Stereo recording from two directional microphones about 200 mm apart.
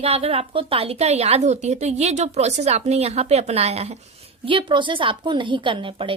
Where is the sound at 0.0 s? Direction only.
30° right (ahead or behind).